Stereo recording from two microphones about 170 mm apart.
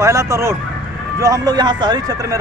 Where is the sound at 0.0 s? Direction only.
20° right (ahead or behind).